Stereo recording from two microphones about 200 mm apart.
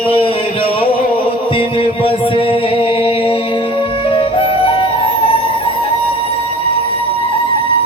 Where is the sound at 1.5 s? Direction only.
25° left (ahead or behind).